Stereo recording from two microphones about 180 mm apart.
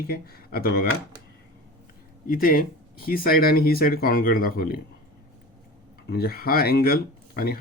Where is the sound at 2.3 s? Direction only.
50° left (ahead or behind).